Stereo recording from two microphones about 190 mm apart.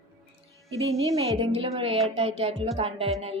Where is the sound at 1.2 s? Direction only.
30° right (ahead or behind).